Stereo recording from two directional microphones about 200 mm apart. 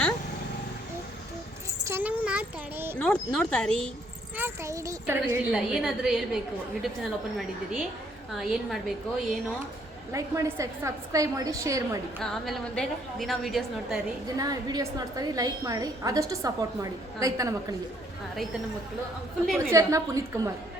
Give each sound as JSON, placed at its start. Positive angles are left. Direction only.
{"t": 1.9, "sound": "a sound", "side_deg": -10}
{"t": 3.0, "sound": "a woman's voice", "side_deg": 5}
{"t": 4.4, "sound": "a woman's voice", "side_deg": -15}
{"t": 10.1, "sound": "a woman's voice", "side_deg": -15}
{"t": 12.2, "sound": "a woman's voice", "side_deg": 5}
{"t": 14.3, "sound": "a woman's voice", "side_deg": -20}
{"t": 19.5, "sound": "a woman's voice", "side_deg": -15}